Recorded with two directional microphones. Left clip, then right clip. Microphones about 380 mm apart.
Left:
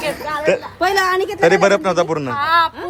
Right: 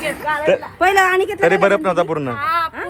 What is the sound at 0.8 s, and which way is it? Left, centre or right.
Speech, right.